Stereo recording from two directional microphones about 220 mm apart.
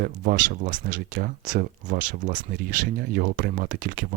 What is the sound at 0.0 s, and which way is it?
Speech, 40° right (ahead or behind).